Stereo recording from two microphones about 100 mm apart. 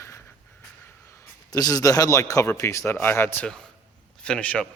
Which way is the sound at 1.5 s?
40° left (ahead or behind).